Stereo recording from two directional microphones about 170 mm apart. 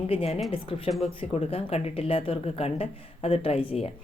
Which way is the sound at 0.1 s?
35° left (ahead or behind).